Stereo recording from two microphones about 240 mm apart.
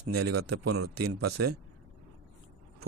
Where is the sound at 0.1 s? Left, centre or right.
Right.